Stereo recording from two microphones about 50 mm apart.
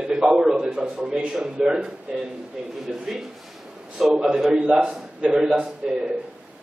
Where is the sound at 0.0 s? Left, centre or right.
Centre.